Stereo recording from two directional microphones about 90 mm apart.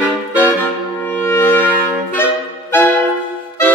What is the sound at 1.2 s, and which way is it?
Music, 25° left (ahead or behind).